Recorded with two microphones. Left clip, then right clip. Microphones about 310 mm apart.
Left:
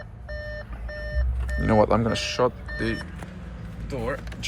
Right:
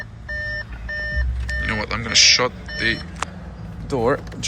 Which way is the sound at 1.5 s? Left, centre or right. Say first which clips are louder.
Left 4 dB; centre.